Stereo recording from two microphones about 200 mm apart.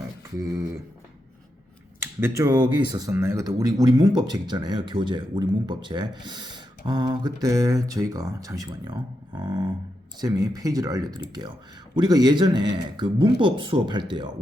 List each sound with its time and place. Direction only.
2.0 s speech: 15° right (ahead or behind)